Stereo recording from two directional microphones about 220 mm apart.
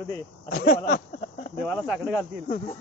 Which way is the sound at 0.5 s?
40° left (ahead or behind).